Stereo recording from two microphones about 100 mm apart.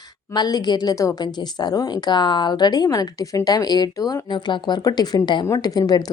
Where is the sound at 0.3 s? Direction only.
45° left (ahead or behind).